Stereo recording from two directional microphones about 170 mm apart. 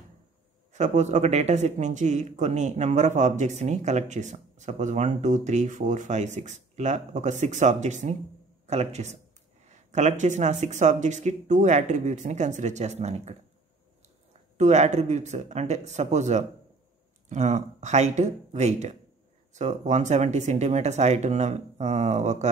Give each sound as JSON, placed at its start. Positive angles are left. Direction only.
{"t": 0.7, "sound": "speech", "side_deg": -45}
{"t": 14.6, "sound": "speech", "side_deg": -45}